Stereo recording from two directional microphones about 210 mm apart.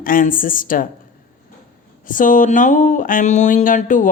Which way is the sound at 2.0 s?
40° left (ahead or behind).